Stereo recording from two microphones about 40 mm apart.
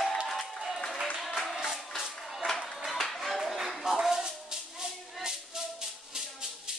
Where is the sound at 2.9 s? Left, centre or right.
Centre.